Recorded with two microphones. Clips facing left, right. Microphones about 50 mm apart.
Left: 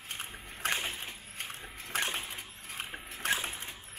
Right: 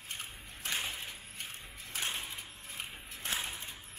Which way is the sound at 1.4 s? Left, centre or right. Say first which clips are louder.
Left 5 dB; left.